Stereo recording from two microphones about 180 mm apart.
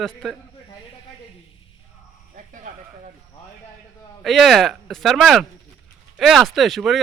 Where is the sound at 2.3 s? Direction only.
45° right (ahead or behind).